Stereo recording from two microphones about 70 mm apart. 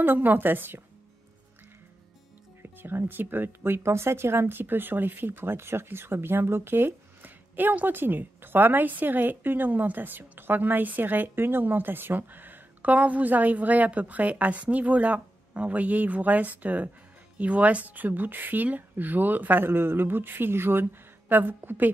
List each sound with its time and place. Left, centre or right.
0.0 s speech: right
2.6 s a woman's voice: right